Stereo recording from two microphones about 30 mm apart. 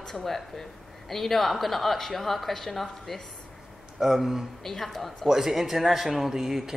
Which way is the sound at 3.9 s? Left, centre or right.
Centre.